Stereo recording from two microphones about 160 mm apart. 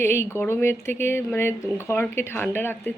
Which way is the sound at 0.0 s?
15° left (ahead or behind).